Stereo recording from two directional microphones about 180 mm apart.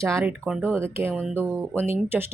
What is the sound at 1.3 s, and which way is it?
Speech, 10° right (ahead or behind).